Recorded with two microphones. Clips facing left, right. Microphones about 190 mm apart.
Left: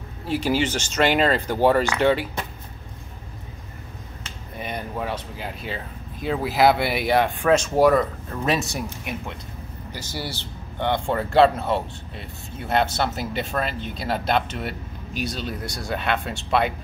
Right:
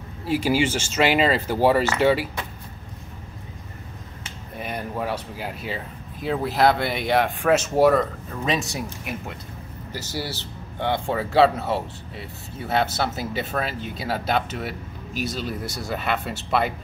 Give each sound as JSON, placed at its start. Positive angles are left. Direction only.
{"t": 0.2, "sound": "speech", "side_deg": -10}
{"t": 4.6, "sound": "speech", "side_deg": -5}